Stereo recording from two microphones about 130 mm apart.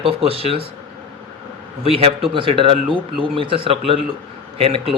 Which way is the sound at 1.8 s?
50° right (ahead or behind).